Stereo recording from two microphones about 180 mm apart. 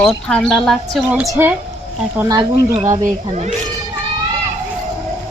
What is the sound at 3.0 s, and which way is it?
Speech, 40° right (ahead or behind).